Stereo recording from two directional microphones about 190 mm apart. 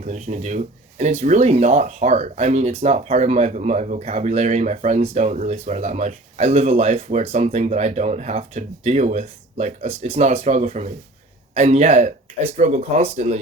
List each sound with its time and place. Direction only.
0.0 s speech: 40° right (ahead or behind)